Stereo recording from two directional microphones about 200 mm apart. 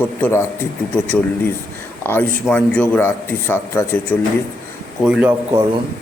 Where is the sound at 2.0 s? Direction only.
10° left (ahead or behind).